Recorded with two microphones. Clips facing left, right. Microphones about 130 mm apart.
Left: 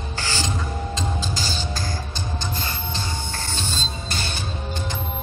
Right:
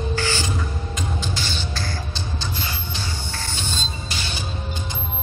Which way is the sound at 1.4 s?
40° left (ahead or behind).